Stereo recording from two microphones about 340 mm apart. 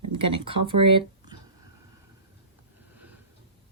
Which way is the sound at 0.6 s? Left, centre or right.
Centre.